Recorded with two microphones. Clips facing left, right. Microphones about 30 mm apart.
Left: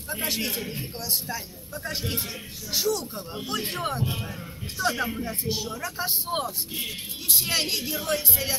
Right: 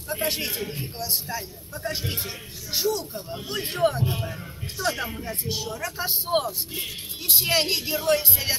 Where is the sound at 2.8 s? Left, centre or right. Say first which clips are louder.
Right 1 dB; right.